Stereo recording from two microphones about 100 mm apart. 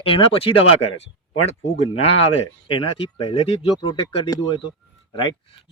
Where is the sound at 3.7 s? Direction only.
55° left (ahead or behind).